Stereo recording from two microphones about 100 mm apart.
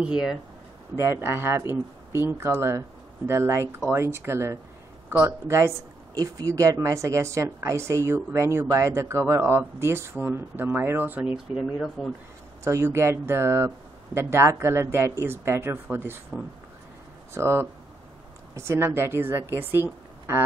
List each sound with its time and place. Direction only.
0.0 s speech: 5° right (ahead or behind)
0.9 s speech: 30° right (ahead or behind)
11.3 s speech: 5° right (ahead or behind)
12.6 s speech: 30° right (ahead or behind)
17.3 s speech: 25° right (ahead or behind)